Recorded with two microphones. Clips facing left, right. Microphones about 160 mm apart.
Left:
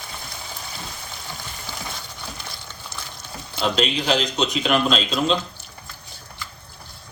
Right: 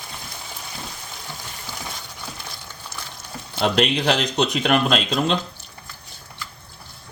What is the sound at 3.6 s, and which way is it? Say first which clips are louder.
Speech: right 2 dB; 60° right (ahead or behind).